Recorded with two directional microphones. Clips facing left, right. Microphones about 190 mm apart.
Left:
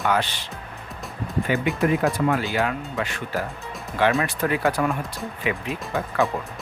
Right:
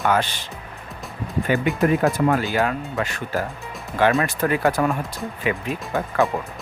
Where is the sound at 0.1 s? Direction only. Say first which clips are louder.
Right 2 dB; 45° right (ahead or behind).